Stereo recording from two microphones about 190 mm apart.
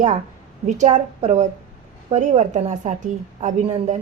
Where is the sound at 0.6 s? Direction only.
40° right (ahead or behind).